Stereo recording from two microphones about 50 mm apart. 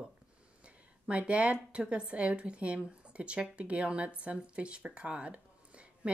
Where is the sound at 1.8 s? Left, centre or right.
Centre.